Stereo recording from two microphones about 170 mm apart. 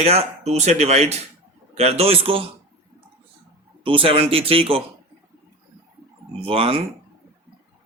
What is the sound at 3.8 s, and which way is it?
Speech, 30° right (ahead or behind).